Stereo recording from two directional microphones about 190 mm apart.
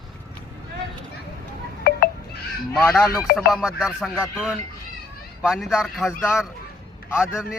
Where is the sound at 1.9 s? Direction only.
50° left (ahead or behind).